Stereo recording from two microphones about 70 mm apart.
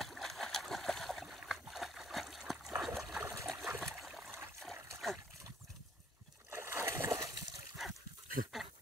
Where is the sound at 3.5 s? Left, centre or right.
Right.